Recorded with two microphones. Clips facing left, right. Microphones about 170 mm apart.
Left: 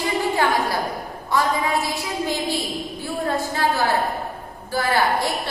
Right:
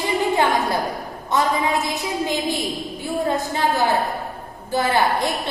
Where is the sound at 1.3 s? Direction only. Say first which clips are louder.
Right 1 dB; 20° right (ahead or behind).